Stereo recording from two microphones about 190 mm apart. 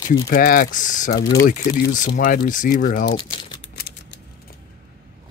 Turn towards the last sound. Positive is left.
turn(degrees=65)  # may be behind; listen again after turning